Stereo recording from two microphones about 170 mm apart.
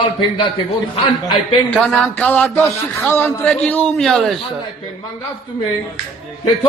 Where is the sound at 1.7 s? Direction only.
5° left (ahead or behind).